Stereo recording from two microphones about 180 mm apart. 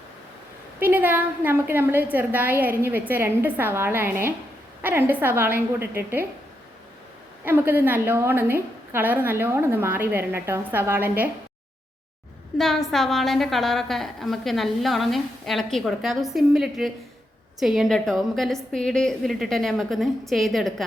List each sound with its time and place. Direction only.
0.8 s a woman's voice: 10° right (ahead or behind)
7.4 s a woman's voice: 10° right (ahead or behind)
12.5 s a woman's voice: centre (ahead or behind)